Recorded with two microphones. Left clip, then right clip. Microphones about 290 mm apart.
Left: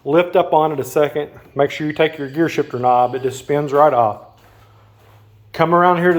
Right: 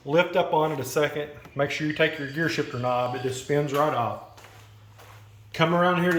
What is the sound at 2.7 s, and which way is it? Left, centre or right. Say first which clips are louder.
Speech: left 11 dB; left.